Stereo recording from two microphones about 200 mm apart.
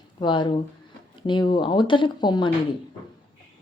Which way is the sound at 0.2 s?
25° left (ahead or behind).